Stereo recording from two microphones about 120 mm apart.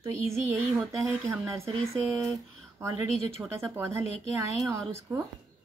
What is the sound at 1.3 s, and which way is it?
Speech, 25° right (ahead or behind).